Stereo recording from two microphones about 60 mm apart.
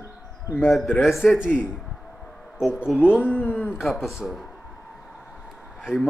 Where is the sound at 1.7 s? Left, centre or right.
Centre.